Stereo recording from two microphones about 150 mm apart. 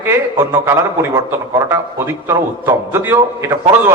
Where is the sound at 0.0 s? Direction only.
15° right (ahead or behind).